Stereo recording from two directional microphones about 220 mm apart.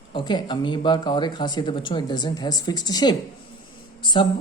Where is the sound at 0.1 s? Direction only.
20° left (ahead or behind).